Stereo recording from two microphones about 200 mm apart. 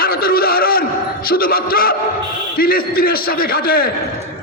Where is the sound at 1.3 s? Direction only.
50° left (ahead or behind).